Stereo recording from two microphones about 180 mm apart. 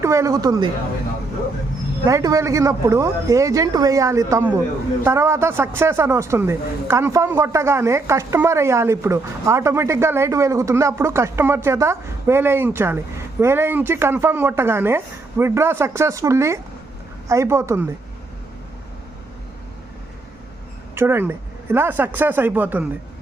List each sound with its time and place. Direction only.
0.0 s speech: 15° right (ahead or behind)
2.0 s a woman's voice: 20° right (ahead or behind)
20.9 s a woman's voice: 15° right (ahead or behind)